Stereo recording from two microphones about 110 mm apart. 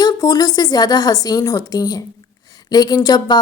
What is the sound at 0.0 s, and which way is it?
A woman's voice, 35° left (ahead or behind).